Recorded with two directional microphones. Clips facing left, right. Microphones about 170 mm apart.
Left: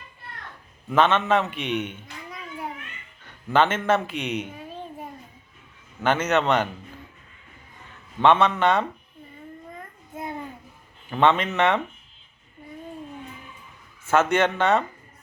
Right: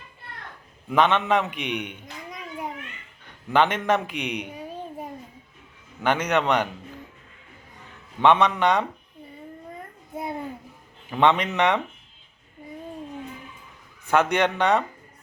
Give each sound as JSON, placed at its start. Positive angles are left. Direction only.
{"t": 0.9, "sound": "a man's voice", "side_deg": -15}
{"t": 6.0, "sound": "a man's voice", "side_deg": -15}
{"t": 8.2, "sound": "a man's voice", "side_deg": -15}
{"t": 11.1, "sound": "a man's voice", "side_deg": -15}
{"t": 14.0, "sound": "a man's voice", "side_deg": -15}